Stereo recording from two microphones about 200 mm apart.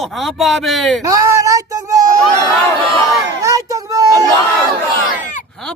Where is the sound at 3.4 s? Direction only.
15° right (ahead or behind).